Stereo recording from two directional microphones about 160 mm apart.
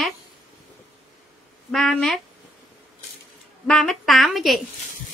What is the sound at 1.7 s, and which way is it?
Speech, centre (ahead or behind).